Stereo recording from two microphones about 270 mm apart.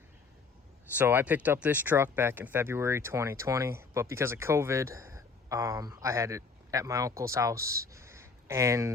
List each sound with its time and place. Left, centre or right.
0.9 s speech: centre